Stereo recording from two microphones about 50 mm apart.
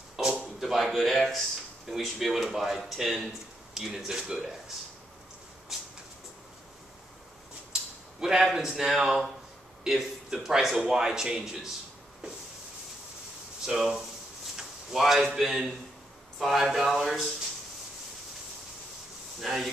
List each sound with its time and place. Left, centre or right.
0.1 s a sound: centre
1.9 s a man's voice: centre
5.7 s a sound: centre
8.2 s a man's voice: centre
13.7 s a man's voice: centre
19.4 s speech: centre